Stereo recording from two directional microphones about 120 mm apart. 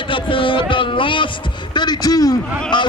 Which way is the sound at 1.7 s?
35° left (ahead or behind).